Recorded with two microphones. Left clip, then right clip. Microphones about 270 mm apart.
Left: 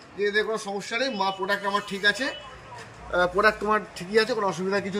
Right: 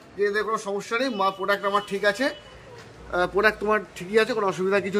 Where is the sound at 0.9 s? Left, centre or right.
Centre.